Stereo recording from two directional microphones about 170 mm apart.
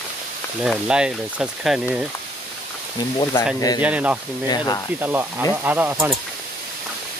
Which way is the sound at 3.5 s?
20° left (ahead or behind).